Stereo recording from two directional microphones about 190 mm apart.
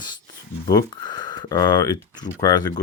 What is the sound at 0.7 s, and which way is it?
Speech, 20° left (ahead or behind).